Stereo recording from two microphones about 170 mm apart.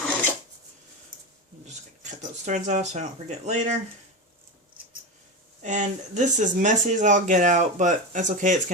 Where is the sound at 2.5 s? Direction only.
45° right (ahead or behind).